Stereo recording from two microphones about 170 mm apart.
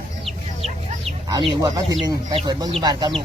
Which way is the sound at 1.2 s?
25° right (ahead or behind).